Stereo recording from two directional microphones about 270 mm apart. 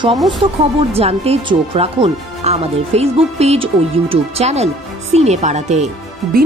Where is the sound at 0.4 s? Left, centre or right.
Right.